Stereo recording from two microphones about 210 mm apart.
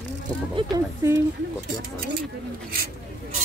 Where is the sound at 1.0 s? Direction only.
15° right (ahead or behind).